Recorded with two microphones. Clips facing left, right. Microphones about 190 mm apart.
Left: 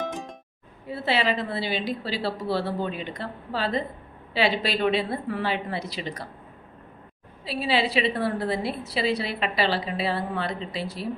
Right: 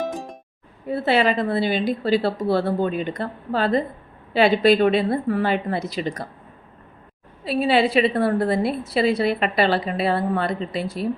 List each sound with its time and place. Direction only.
0.9 s a woman's voice: 50° right (ahead or behind)
7.4 s a woman's voice: 55° right (ahead or behind)